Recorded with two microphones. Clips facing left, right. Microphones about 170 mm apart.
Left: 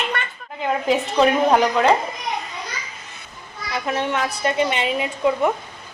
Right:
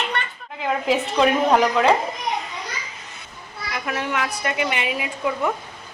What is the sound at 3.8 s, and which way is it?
A woman's voice, 25° left (ahead or behind).